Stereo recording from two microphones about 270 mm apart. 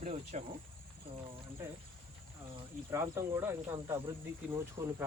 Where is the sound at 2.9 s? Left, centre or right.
Centre.